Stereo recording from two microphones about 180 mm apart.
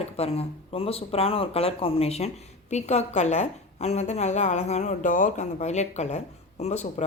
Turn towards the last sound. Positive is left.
turn(degrees=40)  # may be behind; listen again after turning